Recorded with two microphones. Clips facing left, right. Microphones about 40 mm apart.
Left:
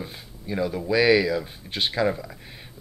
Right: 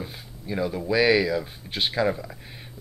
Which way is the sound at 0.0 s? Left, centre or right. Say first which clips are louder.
Even; centre.